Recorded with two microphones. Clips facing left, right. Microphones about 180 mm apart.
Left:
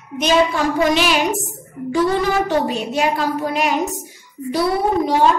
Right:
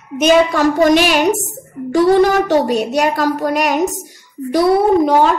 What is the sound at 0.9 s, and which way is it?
Speech, 60° right (ahead or behind).